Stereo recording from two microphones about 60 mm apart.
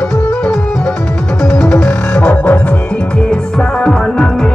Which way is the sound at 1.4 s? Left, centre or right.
Centre.